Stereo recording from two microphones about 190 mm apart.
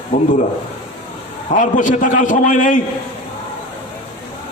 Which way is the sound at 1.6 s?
45° left (ahead or behind).